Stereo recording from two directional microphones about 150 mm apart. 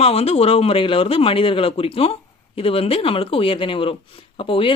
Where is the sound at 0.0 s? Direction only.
40° left (ahead or behind).